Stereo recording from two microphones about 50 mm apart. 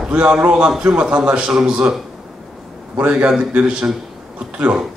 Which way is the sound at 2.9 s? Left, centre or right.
Right.